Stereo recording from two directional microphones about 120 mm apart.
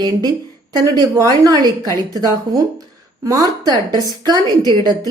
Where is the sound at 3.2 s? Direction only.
30° right (ahead or behind).